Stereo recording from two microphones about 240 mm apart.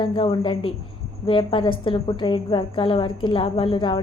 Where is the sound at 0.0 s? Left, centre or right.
Centre.